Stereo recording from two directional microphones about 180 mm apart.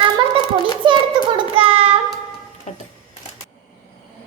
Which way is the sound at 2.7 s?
35° left (ahead or behind).